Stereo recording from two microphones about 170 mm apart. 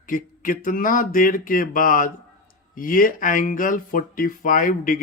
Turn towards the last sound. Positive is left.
turn(degrees=55)  # may be behind; listen again after turning